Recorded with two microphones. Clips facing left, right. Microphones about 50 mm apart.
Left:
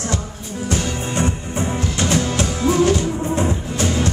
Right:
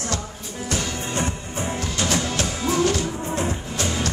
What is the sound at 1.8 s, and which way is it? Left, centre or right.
Music, left.